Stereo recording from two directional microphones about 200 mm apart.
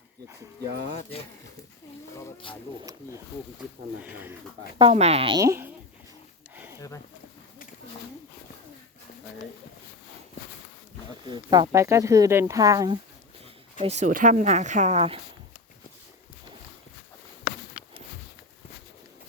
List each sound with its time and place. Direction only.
4.0 s speech: 10° right (ahead or behind)
4.8 s a woman's voice: 30° right (ahead or behind)
5.4 s speech: 15° right (ahead or behind)
6.7 s speech: 15° left (ahead or behind)
11.3 s speech: 20° right (ahead or behind)
13.7 s a woman's voice: 35° right (ahead or behind)
17.5 s a sound: 45° left (ahead or behind)